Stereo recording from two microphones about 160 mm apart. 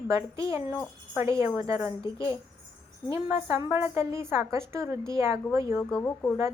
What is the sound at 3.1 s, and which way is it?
A woman's voice, 15° right (ahead or behind).